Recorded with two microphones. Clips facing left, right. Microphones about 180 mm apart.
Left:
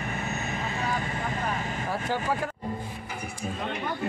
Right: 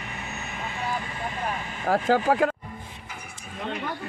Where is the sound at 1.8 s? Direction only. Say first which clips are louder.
Right 10 dB; 90° right.